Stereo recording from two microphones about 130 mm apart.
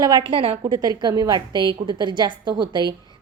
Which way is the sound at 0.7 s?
30° right (ahead or behind).